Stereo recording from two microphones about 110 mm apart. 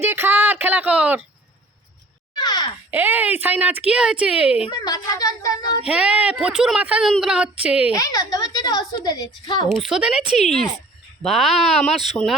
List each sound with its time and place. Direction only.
0.0 s speech: 20° right (ahead or behind)
2.4 s a sound: 40° left (ahead or behind)
2.9 s speech: 15° right (ahead or behind)
4.8 s a woman's voice: 35° left (ahead or behind)
5.8 s speech: 10° right (ahead or behind)
7.9 s a woman's voice: 35° left (ahead or behind)
9.6 s speech: centre (ahead or behind)